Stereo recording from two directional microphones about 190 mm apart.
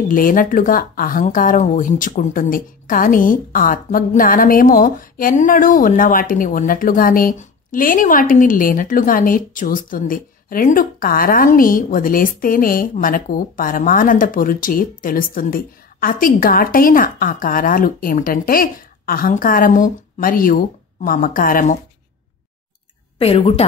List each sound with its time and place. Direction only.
0.1 s speech: 45° left (ahead or behind)
23.1 s a woman's voice: 30° left (ahead or behind)